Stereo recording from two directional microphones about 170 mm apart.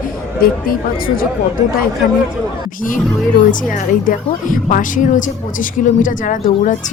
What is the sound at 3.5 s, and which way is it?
A woman's voice, 50° left (ahead or behind).